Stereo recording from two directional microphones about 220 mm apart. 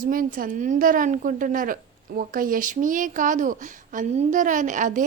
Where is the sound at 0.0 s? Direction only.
40° right (ahead or behind).